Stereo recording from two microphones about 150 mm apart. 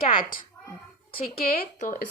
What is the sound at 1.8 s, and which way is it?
Speech, 60° left (ahead or behind).